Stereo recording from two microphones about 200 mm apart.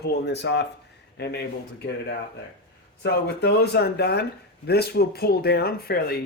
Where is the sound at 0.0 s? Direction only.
60° left (ahead or behind).